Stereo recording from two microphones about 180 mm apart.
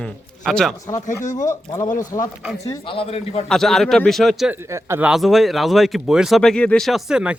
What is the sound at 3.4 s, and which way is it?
Speech, centre (ahead or behind).